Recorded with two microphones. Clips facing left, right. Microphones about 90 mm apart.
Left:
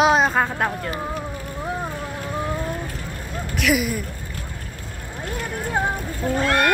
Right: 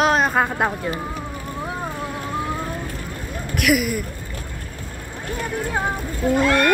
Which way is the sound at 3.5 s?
5° right (ahead or behind).